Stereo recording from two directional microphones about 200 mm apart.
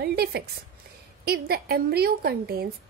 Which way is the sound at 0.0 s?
55° right (ahead or behind).